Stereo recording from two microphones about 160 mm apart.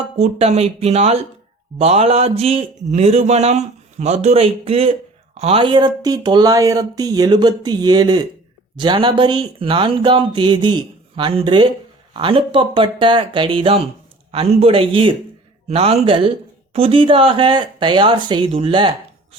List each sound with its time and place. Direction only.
0.2 s speech: 40° right (ahead or behind)